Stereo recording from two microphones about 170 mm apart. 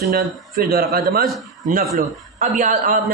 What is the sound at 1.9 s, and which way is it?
A man's voice, 50° right (ahead or behind).